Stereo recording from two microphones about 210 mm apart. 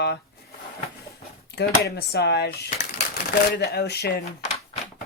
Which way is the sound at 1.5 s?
50° left (ahead or behind).